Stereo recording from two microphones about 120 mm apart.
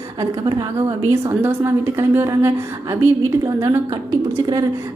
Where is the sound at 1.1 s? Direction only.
20° right (ahead or behind).